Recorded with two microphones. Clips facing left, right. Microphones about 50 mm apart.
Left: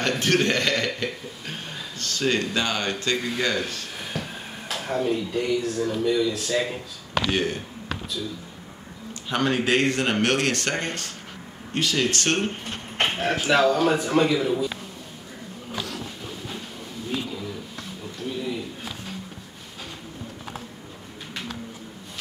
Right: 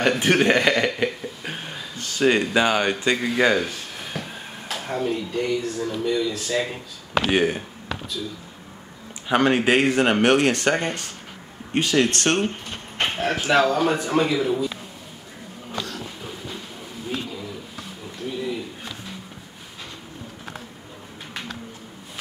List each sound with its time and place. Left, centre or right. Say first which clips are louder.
0.2 s a man's voice: right 2 dB; centre
4.0 s speech: even; centre
7.2 s a sound: right 6 dB; centre
9.3 s speech: right 4 dB; centre
12.1 s speech: right 2 dB; right
13.0 s speech: even; centre
17.1 s a sound: even; centre